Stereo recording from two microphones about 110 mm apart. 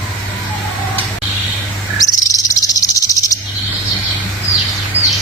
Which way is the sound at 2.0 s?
30° left (ahead or behind).